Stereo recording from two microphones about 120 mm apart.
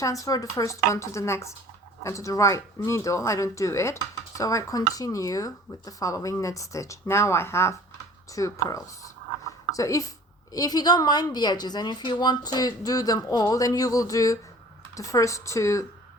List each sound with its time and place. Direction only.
0.0 s a woman's voice: 25° left (ahead or behind)